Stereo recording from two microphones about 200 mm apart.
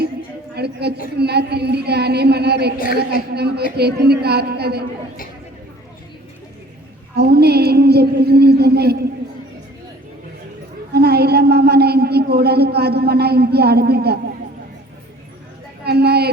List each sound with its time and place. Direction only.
0.5 s a man's voice: 55° right (ahead or behind)
7.2 s a man's voice: 55° right (ahead or behind)
10.9 s speech: 55° right (ahead or behind)
15.8 s a man's voice: 55° right (ahead or behind)